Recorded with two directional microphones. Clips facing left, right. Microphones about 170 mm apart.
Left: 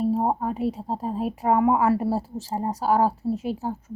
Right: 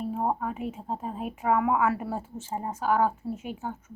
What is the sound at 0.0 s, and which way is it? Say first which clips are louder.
Speech: left 6 dB; 35° left (ahead or behind).